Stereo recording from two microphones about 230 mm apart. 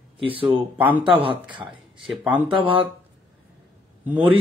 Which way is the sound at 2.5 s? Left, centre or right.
Right.